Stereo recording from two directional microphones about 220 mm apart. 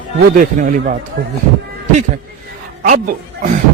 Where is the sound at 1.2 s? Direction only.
50° right (ahead or behind).